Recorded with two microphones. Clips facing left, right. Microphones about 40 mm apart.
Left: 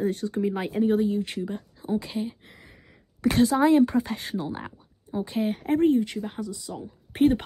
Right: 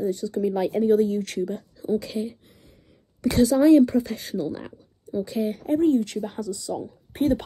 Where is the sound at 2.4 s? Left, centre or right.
Left.